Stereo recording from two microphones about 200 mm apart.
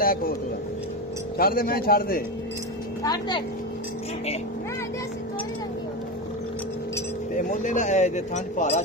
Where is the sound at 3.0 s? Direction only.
20° left (ahead or behind).